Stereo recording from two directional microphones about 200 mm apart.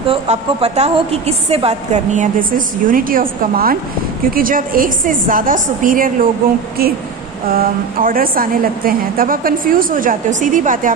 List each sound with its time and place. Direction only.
0.1 s a woman's voice: 30° right (ahead or behind)